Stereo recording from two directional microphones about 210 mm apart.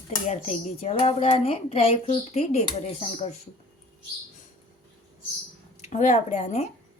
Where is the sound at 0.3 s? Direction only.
30° left (ahead or behind).